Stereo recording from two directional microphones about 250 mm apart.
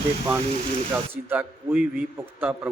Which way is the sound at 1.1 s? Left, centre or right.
Centre.